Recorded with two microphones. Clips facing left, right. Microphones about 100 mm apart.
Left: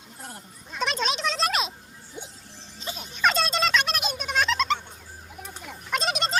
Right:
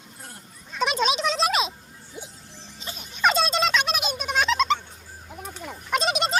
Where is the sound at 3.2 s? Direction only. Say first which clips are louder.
Right 2 dB; centre (ahead or behind).